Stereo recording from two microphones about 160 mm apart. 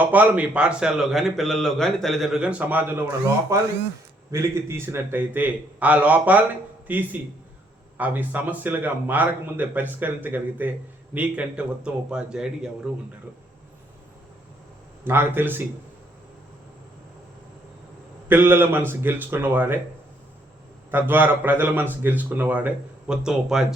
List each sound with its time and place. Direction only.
0.0 s a man's voice: 10° right (ahead or behind)
15.0 s a man's voice: 15° right (ahead or behind)
18.3 s a man's voice: 15° right (ahead or behind)
20.9 s a man's voice: 10° right (ahead or behind)